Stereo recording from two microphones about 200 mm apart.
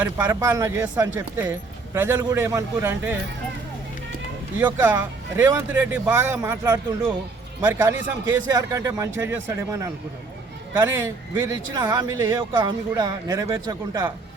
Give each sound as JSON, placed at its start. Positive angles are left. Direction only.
{"t": 0.0, "sound": "speech", "side_deg": -15}
{"t": 4.5, "sound": "speech", "side_deg": -10}